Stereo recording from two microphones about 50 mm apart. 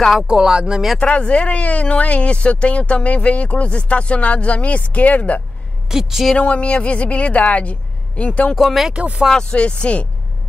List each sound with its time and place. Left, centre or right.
0.3 s speech: centre
0.9 s speech: left
5.9 s speech: centre
6.3 s speech: left
8.5 s speech: centre
8.9 s speech: right
9.3 s speech: centre